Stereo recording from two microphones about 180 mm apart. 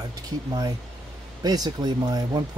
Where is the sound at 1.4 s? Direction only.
20° right (ahead or behind).